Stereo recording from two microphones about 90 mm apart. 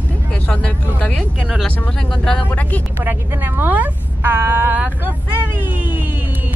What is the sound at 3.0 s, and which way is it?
A woman's voice, 20° right (ahead or behind).